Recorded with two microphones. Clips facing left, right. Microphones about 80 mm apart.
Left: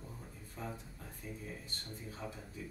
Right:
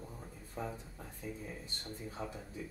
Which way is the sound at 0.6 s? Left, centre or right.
Centre.